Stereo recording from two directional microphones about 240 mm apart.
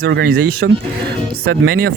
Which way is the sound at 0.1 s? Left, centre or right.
Right.